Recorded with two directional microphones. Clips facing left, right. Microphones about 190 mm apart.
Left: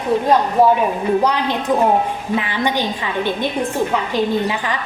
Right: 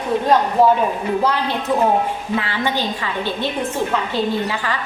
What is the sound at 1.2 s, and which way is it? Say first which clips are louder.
A woman's voice: left 2 dB; 15° left (ahead or behind).